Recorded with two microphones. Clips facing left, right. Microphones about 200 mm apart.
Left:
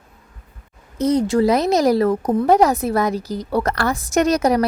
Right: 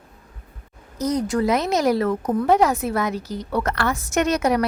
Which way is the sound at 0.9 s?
30° left (ahead or behind).